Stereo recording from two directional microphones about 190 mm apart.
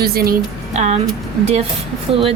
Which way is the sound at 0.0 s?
55° right (ahead or behind).